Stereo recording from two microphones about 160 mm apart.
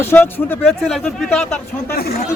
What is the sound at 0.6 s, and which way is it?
Speech, 5° left (ahead or behind).